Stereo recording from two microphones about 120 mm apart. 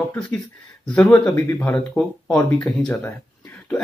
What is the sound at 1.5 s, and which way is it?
Speech, 10° left (ahead or behind).